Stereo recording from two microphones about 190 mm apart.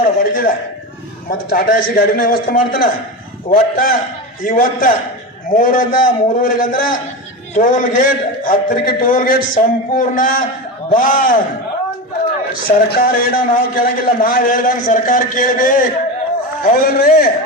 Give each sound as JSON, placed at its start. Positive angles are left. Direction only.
{"t": 0.0, "sound": "a man's voice", "side_deg": 45}
{"t": 12.6, "sound": "a man's voice", "side_deg": 50}